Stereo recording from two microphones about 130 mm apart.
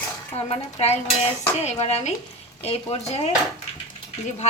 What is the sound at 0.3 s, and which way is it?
Speech, 55° left (ahead or behind).